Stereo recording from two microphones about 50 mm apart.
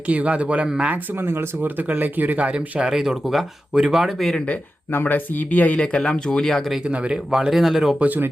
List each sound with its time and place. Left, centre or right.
0.1 s speech: right
1.2 s speech: right
1.6 s speech: right
2.5 s speech: right
2.9 s speech: centre
4.9 s speech: left
5.7 s speech: left
6.8 s speech: right
7.3 s speech: centre
7.9 s speech: right